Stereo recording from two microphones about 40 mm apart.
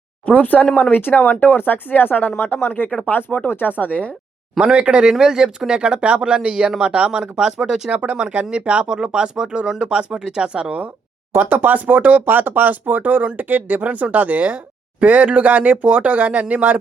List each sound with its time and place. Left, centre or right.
0.3 s speech: left
2.3 s speech: left
4.6 s speech: right
11.4 s speech: right